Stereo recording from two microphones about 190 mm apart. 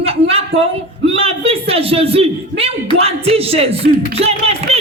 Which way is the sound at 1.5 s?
30° right (ahead or behind).